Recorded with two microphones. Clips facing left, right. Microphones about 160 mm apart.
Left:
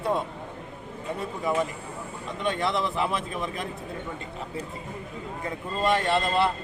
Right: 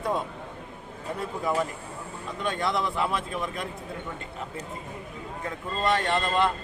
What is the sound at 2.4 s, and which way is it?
Speech, centre (ahead or behind).